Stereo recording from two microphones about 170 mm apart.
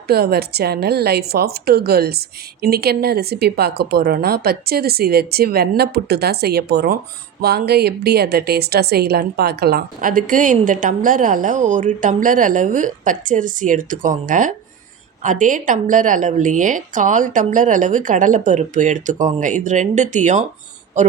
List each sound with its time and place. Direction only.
0.1 s a woman's voice: 70° right (ahead or behind); by 20.4 s 45° right (ahead or behind)